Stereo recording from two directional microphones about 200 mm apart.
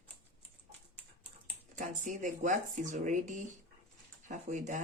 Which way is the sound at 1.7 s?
40° right (ahead or behind).